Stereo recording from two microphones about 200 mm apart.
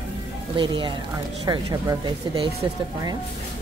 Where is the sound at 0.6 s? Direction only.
25° right (ahead or behind).